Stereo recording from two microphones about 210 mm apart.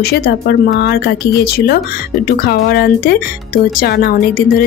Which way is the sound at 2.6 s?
45° left (ahead or behind).